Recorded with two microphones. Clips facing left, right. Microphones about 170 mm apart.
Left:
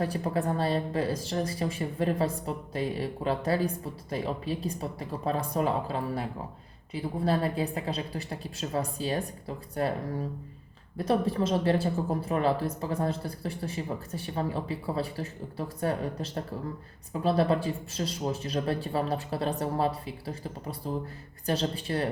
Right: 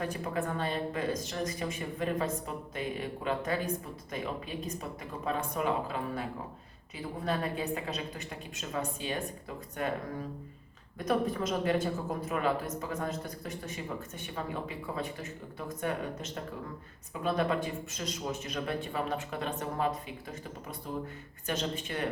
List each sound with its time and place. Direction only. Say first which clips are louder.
0.0 s speech: left 5 dB; 35° left (ahead or behind)
10.9 s speech: left 3 dB; 30° left (ahead or behind)